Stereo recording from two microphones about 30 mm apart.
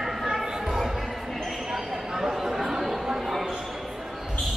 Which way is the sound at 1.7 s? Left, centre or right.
Centre.